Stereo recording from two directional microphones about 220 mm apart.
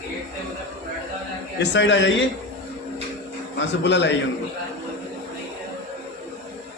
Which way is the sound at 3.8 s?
50° left (ahead or behind).